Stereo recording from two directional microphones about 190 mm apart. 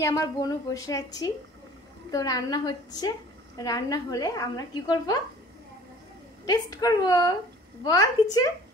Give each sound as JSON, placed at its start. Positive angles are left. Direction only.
{"t": 0.0, "sound": "a woman's voice", "side_deg": 15}
{"t": 6.4, "sound": "a woman's voice", "side_deg": 20}